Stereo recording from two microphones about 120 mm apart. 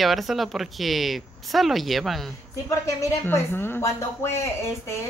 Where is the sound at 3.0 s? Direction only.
20° left (ahead or behind).